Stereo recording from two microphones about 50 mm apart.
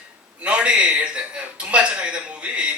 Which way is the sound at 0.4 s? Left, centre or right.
Right.